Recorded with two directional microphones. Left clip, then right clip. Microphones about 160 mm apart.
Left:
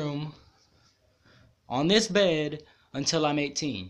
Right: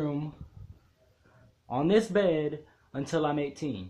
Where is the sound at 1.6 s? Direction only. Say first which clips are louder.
Left 1 dB; 10° left (ahead or behind).